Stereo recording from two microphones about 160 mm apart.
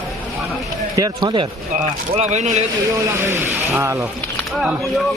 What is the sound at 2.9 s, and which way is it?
Speech, 15° right (ahead or behind).